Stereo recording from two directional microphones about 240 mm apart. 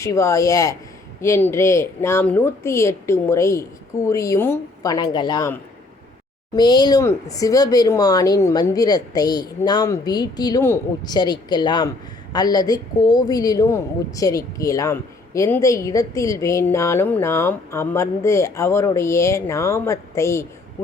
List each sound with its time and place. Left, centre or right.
0.0 s a woman's voice: centre